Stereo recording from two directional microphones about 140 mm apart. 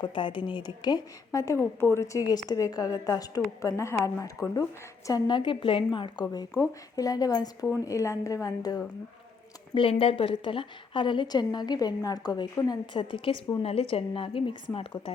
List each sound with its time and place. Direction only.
0.0 s a woman's voice: 35° left (ahead or behind)
9.7 s a woman's voice: 40° left (ahead or behind)